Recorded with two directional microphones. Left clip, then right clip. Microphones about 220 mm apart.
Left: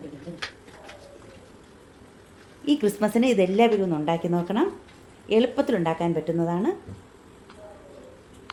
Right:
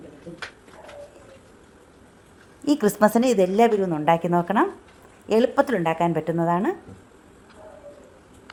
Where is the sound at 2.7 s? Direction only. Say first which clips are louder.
Right 4 dB; 30° right (ahead or behind).